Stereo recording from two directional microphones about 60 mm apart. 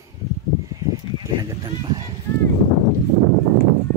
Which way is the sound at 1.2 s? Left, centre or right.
Right.